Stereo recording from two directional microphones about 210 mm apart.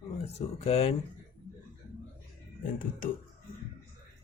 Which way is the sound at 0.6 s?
30° left (ahead or behind).